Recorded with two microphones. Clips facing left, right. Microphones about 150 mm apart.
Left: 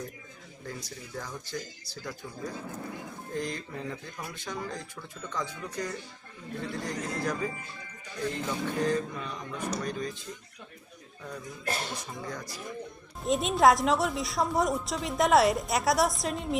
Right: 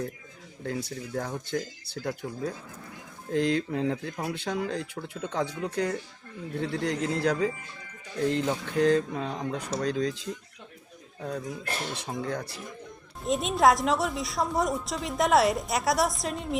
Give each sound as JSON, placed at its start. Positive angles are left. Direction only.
{"t": 0.6, "sound": "speech", "side_deg": -60}
{"t": 3.3, "sound": "speech", "side_deg": -80}
{"t": 11.2, "sound": "speech", "side_deg": -65}
{"t": 13.2, "sound": "a woman's voice", "side_deg": 0}